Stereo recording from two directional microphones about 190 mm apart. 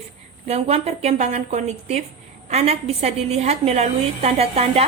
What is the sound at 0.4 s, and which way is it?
A woman's voice, 35° right (ahead or behind).